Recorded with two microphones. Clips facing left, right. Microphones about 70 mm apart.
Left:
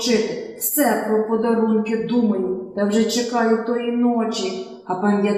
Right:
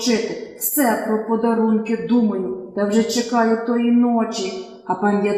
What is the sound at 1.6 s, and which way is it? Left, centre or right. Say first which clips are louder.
Speech: even; centre.